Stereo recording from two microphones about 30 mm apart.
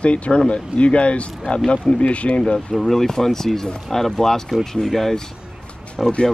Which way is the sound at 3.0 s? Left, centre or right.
Centre.